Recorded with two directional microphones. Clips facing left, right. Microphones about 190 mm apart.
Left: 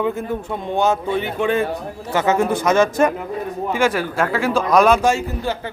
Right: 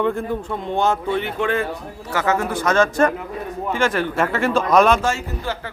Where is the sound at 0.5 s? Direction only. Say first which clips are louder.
Left 2 dB; 15° left (ahead or behind).